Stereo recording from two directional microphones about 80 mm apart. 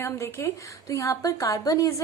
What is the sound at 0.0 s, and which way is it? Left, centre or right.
A woman's voice, left.